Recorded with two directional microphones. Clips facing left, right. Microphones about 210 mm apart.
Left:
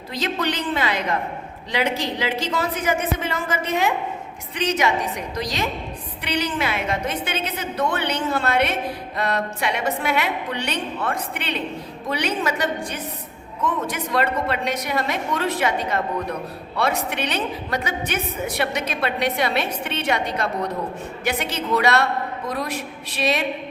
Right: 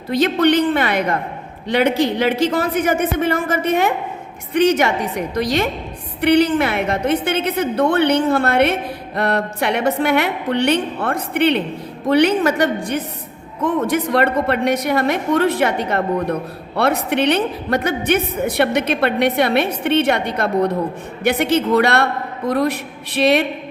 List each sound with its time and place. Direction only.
0.1 s a woman's voice: 60° right (ahead or behind)